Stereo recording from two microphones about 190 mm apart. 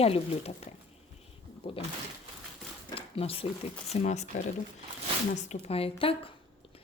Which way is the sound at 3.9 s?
35° left (ahead or behind).